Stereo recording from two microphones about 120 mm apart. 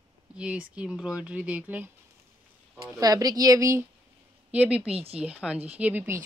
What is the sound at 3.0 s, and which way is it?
Speech, 30° right (ahead or behind).